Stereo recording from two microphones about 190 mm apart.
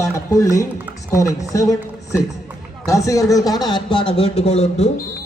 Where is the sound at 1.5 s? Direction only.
15° left (ahead or behind).